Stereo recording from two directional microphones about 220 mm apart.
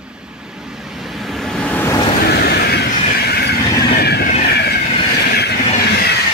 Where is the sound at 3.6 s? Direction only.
15° left (ahead or behind).